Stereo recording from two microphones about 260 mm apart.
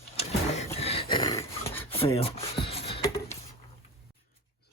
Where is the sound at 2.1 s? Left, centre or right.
Left.